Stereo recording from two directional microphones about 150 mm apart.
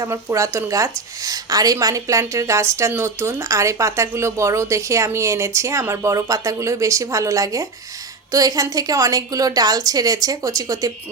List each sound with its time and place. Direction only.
0.0 s a woman's voice: 20° right (ahead or behind)